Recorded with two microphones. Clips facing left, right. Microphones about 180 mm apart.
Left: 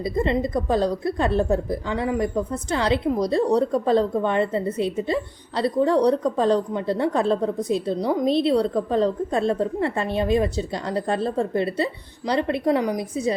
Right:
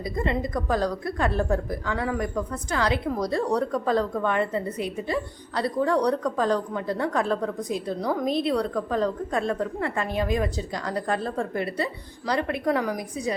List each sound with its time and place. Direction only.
0.0 s a woman's voice: 25° left (ahead or behind)